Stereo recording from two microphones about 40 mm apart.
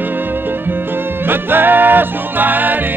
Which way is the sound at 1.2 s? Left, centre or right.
Right.